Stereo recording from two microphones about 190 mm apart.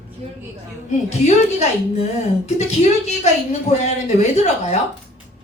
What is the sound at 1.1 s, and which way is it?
Speech, 35° left (ahead or behind).